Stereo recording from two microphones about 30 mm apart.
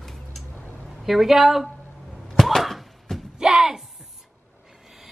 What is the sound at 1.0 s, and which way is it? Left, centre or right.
Speech, centre.